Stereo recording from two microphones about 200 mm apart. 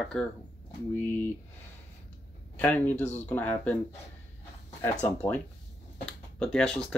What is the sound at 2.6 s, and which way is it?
Speech, 10° left (ahead or behind).